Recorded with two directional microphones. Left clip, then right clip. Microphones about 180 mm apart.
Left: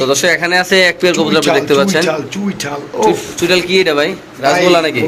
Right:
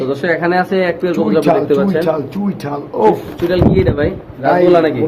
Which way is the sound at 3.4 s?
20° left (ahead or behind).